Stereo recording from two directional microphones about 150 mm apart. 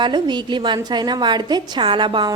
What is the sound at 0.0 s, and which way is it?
A woman's voice, 30° right (ahead or behind).